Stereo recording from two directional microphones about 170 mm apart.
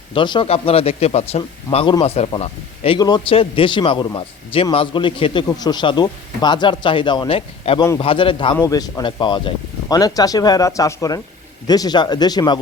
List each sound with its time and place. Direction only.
0.1 s a man's voice: 30° left (ahead or behind)
8.5 s a man's voice: 20° left (ahead or behind)